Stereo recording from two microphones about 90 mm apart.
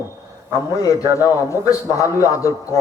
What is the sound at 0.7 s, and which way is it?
A man's voice, 35° left (ahead or behind).